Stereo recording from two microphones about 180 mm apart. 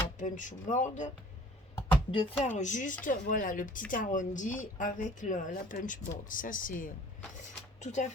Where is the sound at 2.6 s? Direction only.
45° left (ahead or behind).